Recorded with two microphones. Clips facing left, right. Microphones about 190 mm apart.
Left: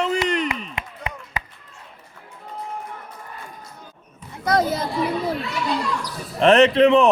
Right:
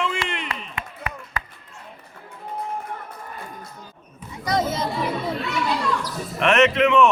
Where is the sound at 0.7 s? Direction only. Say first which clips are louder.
Left 1 dB; 20° left (ahead or behind).